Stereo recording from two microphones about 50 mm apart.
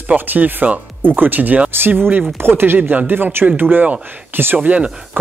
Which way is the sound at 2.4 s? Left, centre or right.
Right.